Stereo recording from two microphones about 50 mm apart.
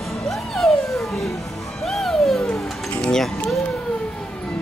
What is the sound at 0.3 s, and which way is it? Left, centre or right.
Music, centre.